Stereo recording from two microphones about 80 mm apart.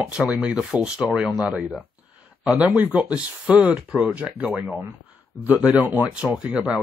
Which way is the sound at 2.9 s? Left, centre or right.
Centre.